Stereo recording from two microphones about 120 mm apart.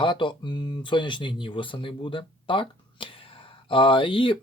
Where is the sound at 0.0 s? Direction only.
45° left (ahead or behind).